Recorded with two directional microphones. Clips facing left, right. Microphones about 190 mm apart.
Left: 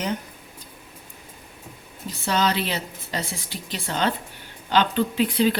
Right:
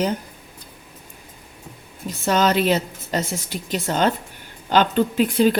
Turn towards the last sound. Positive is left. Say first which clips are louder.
# right 3 dB
turn(degrees=-45)  # may be behind; listen again after turning